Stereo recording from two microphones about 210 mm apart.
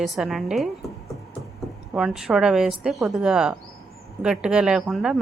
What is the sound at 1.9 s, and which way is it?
Speech, 5° right (ahead or behind).